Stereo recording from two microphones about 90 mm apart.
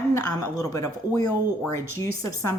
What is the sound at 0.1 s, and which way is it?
Speech, 35° left (ahead or behind).